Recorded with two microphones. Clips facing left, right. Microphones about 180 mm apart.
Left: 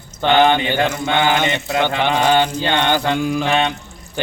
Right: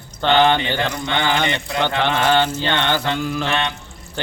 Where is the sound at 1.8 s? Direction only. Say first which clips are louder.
Left 1 dB; 15° left (ahead or behind).